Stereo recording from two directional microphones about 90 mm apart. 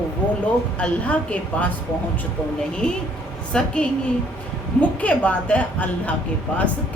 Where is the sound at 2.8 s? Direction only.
10° left (ahead or behind).